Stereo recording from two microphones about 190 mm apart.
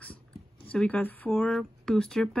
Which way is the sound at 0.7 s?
10° left (ahead or behind).